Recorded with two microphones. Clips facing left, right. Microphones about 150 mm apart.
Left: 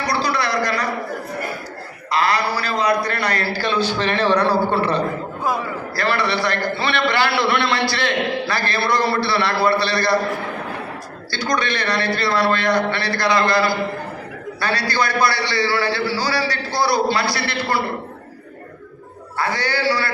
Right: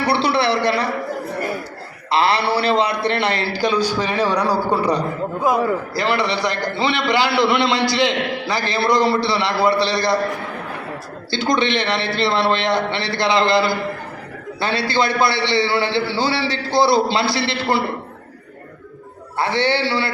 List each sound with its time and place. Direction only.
0.0 s a sound: 30° right (ahead or behind)
2.0 s a man's voice: 30° right (ahead or behind)
11.3 s a man's voice: 25° right (ahead or behind)
19.4 s a man's voice: 25° right (ahead or behind)